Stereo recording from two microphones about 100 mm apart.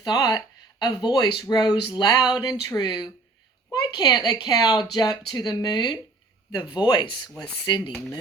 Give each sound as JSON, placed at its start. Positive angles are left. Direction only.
{"t": 0.0, "sound": "speech", "side_deg": 45}